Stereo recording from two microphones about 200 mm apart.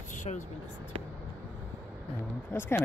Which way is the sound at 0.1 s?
40° left (ahead or behind).